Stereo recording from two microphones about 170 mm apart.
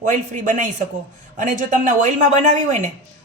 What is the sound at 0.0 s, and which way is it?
Speech, 45° right (ahead or behind).